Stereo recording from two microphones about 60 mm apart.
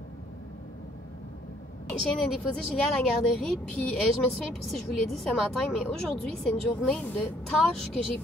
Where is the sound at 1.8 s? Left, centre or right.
Centre.